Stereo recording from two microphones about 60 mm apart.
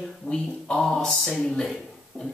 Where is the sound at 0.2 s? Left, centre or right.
Left.